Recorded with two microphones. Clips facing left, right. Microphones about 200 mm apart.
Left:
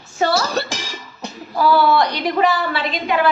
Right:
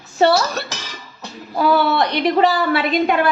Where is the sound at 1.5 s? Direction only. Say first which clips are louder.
Left 1 dB; 25° right (ahead or behind).